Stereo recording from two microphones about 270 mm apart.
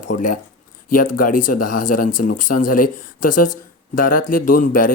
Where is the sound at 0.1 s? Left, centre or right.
Left.